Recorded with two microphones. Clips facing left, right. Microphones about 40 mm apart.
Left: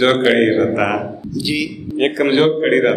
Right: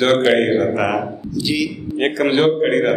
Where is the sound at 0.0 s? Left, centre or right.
Centre.